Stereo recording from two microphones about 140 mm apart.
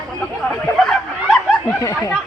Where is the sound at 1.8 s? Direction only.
25° left (ahead or behind).